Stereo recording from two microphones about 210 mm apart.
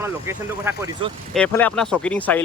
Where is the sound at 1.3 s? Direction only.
5° left (ahead or behind).